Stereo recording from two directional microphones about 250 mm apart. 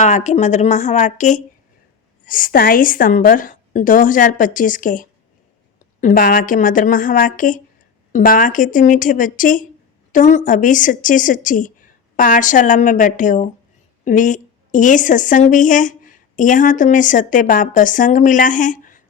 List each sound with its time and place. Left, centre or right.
0.0 s a woman's voice: left